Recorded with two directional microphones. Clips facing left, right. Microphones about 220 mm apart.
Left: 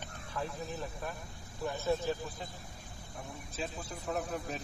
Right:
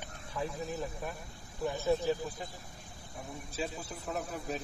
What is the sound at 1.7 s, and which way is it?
Speech, 15° right (ahead or behind).